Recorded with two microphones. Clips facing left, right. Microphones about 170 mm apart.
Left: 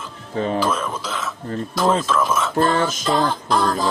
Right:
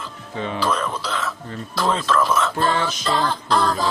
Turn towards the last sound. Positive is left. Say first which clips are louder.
# even
turn(degrees=10)  # may be behind; listen again after turning